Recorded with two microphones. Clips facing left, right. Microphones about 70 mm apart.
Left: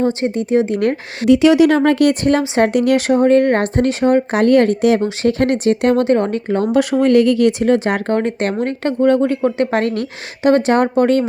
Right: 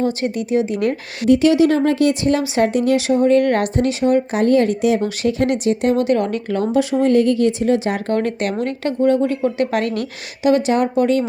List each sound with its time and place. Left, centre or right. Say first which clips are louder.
0.0 s speech: left 3 dB; left
0.6 s speech: left 3 dB; left
1.3 s speech: left 3 dB; left
2.6 s speech: left 2 dB; left
3.4 s speech: left 2 dB; left
3.8 s speech: left 2 dB; left
4.4 s speech: left 4 dB; left
4.7 s speech: left 3 dB; left
6.1 s speech: left 3 dB; left
7.0 s speech: left 3 dB; left
8.0 s speech: left 2 dB; left